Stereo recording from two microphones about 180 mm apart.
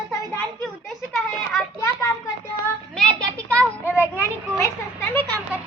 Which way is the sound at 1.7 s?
20° left (ahead or behind).